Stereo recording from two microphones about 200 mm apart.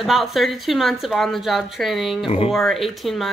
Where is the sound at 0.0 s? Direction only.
Centre (ahead or behind).